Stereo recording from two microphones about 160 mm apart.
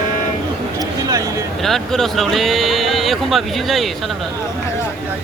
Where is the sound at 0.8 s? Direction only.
20° right (ahead or behind).